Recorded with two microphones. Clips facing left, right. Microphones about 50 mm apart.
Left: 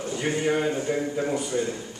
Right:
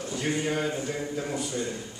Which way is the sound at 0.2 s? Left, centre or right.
Centre.